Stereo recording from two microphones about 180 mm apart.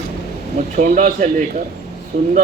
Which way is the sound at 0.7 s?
45° right (ahead or behind).